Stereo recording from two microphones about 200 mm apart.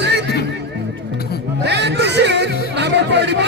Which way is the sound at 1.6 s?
60° right (ahead or behind).